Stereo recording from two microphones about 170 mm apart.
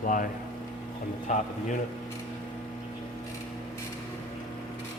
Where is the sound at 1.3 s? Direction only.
50° left (ahead or behind).